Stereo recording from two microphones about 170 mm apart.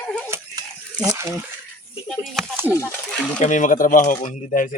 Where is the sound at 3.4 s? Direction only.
45° left (ahead or behind).